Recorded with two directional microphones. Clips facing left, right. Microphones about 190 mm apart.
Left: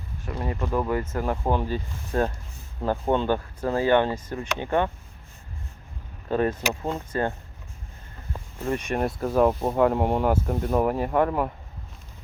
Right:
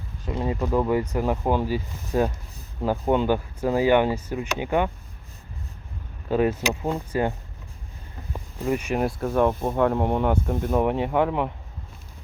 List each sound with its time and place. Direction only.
0.3 s speech: 20° right (ahead or behind)
6.3 s speech: 10° right (ahead or behind)